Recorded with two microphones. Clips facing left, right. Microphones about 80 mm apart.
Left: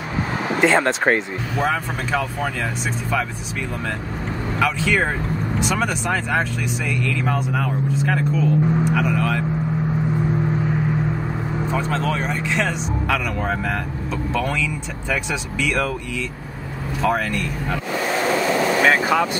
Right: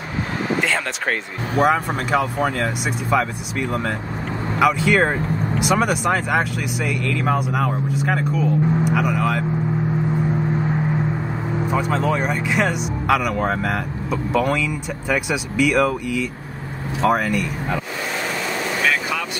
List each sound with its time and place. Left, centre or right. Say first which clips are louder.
0.6 s speech: left 5 dB; left
1.6 s speech: right 5 dB; centre
4.6 s speech: right 4 dB; centre
11.7 s speech: right 3 dB; centre
18.8 s vehicle: left 4 dB; left